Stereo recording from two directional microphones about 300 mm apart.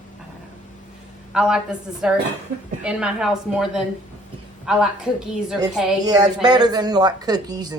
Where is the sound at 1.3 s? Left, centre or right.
Centre.